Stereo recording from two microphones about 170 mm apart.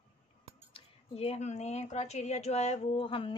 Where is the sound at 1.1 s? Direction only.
35° left (ahead or behind).